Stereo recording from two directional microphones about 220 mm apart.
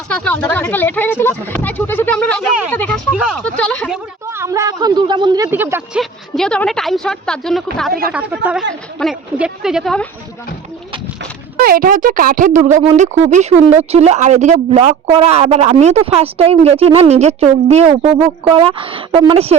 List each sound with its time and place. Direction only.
0.1 s a woman's voice: 5° left (ahead or behind)
3.9 s speech: 10° right (ahead or behind)
6.0 s a woman's voice: centre (ahead or behind)
11.6 s a woman's voice: 40° right (ahead or behind)